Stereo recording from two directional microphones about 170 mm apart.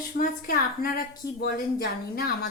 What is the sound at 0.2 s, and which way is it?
A woman's voice, 55° left (ahead or behind).